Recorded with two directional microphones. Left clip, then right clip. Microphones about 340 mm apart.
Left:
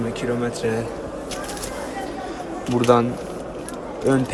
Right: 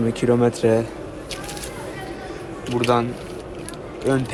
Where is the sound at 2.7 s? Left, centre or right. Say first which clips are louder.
Left 3 dB; centre.